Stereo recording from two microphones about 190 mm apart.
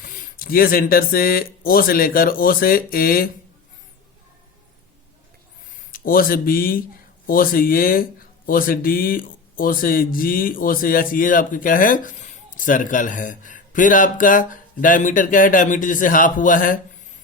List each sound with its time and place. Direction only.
0.0 s speech: 45° left (ahead or behind)
5.9 s speech: 50° left (ahead or behind)